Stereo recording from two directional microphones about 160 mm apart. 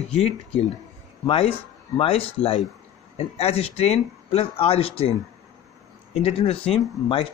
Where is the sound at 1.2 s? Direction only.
35° left (ahead or behind).